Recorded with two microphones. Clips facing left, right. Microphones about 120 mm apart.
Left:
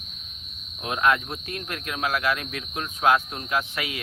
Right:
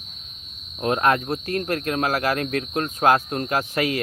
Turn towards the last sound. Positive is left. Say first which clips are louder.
# right 5 dB
turn(degrees=-45)  # may be behind; listen again after turning